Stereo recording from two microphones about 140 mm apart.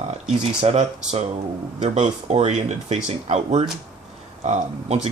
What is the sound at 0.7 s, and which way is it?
Speech, 50° right (ahead or behind).